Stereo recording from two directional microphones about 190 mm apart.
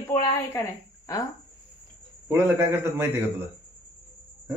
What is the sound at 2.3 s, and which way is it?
Speech, 10° right (ahead or behind).